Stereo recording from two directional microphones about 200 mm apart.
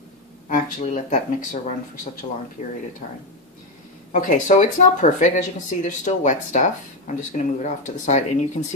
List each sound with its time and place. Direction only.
0.5 s speech: 40° left (ahead or behind)
4.1 s speech: 40° left (ahead or behind)